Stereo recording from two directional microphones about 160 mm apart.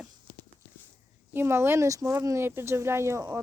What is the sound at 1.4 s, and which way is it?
Speech, 15° right (ahead or behind).